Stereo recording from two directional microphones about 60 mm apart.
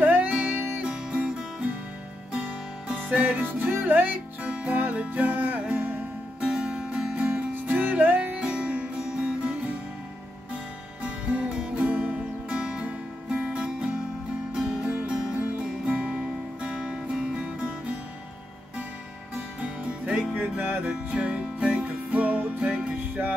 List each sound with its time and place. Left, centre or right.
0.0 s music: right
3.7 s music: right
6.4 s music: centre
8.4 s music: centre
11.0 s music: centre
19.6 s music: centre
20.3 s music: right